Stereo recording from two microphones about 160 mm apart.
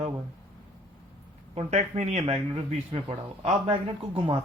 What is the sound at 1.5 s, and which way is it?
A man's voice, 45° right (ahead or behind).